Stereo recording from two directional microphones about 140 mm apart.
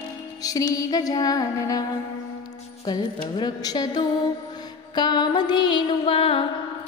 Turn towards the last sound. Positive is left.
turn(degrees=40)  # may be behind; listen again after turning